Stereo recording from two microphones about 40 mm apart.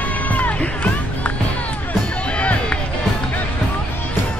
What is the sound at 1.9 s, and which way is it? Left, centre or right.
Music, left.